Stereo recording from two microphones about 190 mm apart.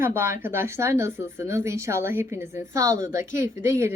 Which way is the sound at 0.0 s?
10° right (ahead or behind).